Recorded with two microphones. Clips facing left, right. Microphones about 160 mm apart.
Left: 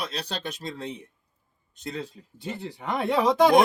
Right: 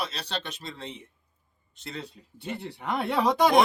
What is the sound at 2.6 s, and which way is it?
Speech, 15° left (ahead or behind).